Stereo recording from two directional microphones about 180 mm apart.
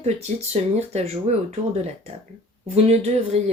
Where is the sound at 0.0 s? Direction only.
35° right (ahead or behind).